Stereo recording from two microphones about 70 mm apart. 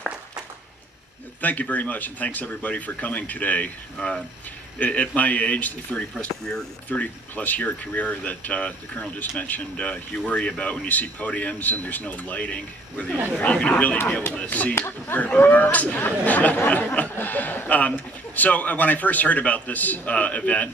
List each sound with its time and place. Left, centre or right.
1.4 s speech: left